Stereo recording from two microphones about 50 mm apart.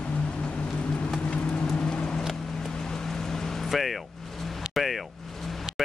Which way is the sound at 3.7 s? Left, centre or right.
Centre.